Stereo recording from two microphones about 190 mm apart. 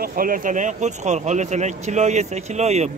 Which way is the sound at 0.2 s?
45° right (ahead or behind).